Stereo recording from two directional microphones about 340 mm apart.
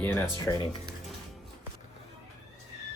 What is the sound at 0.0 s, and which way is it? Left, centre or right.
Speech, centre.